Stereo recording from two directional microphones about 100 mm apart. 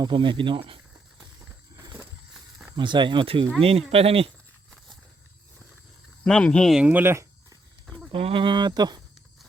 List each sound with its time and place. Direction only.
0.0 s speech: 55° right (ahead or behind)
1.7 s a sound: 40° right (ahead or behind)
2.7 s speech: 50° right (ahead or behind)
3.6 s speech: 75° right (ahead or behind)
6.2 s speech: 10° left (ahead or behind)
6.7 s speech: 10° right (ahead or behind)
7.0 s speech: 25° right (ahead or behind)
8.1 s speech: 60° right (ahead or behind); by 9.0 s 45° right (ahead or behind)